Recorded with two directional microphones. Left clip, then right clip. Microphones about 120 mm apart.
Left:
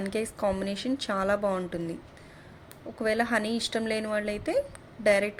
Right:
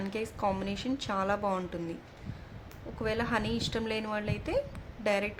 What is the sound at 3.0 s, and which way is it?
A woman's voice, 30° left (ahead or behind).